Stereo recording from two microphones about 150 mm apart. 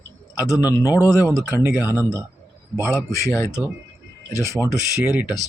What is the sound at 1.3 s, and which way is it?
Speech, 20° left (ahead or behind).